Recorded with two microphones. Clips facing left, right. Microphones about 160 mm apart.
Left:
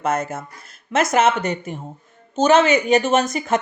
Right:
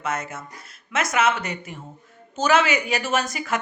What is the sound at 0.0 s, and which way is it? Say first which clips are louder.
Speech: left 6 dB; 50° left (ahead or behind).